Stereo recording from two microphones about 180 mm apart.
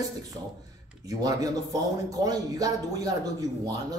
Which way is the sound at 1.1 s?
20° right (ahead or behind).